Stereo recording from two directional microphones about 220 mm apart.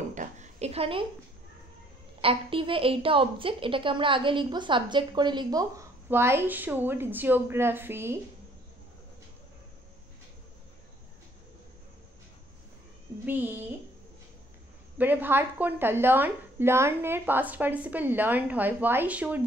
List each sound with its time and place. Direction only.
0.1 s a sound: 35° right (ahead or behind)
2.2 s a woman's voice: 25° right (ahead or behind)
13.2 s a woman's voice: 10° right (ahead or behind)
15.0 s a woman's voice: 10° right (ahead or behind)